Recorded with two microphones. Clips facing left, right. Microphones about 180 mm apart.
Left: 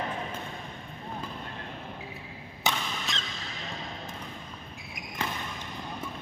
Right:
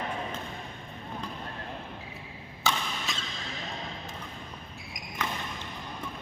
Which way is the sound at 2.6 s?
20° left (ahead or behind).